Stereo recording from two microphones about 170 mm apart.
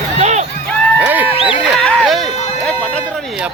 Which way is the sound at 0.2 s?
40° right (ahead or behind).